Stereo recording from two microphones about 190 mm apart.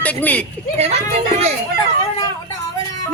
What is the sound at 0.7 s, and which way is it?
Speech, 35° right (ahead or behind).